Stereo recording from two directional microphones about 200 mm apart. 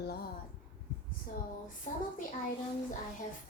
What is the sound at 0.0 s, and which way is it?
Speech, 50° left (ahead or behind).